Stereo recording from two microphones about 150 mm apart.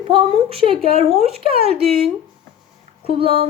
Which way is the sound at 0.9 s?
45° right (ahead or behind).